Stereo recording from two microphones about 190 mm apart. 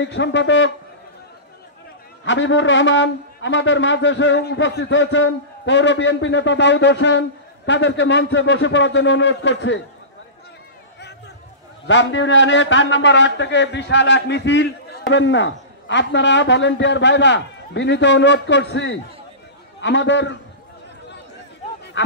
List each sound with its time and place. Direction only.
0.0 s a man's voice: 70° left (ahead or behind)
2.2 s a man's voice: 75° left (ahead or behind)
11.8 s a man's voice: 70° left (ahead or behind)
22.0 s speech: 70° left (ahead or behind)